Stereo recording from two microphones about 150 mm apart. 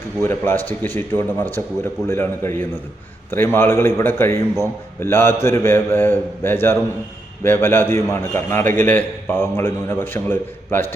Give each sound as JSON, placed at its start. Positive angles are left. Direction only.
{"t": 0.2, "sound": "a man's voice", "side_deg": 15}